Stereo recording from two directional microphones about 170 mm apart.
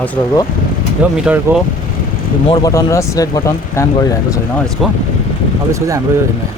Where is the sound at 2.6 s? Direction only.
15° left (ahead or behind).